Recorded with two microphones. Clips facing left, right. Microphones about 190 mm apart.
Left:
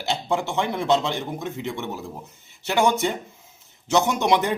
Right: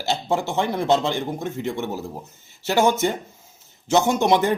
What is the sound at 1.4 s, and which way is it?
Speech, 50° right (ahead or behind).